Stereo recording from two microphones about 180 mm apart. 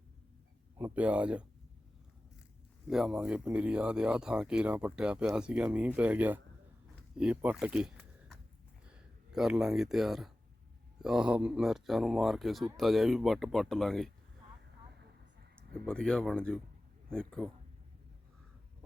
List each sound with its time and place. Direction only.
0.8 s speech: 10° right (ahead or behind)
2.8 s speech: 5° right (ahead or behind)
15.9 s speech: 5° left (ahead or behind)